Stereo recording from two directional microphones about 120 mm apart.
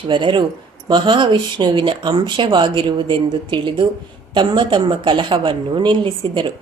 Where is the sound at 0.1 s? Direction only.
45° right (ahead or behind).